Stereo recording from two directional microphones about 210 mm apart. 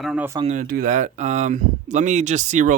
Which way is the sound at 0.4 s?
40° right (ahead or behind).